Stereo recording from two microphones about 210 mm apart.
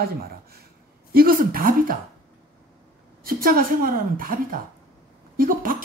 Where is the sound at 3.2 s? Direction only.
45° right (ahead or behind).